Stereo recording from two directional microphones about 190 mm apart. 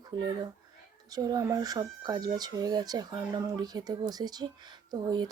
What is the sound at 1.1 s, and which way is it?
Speech, 20° right (ahead or behind).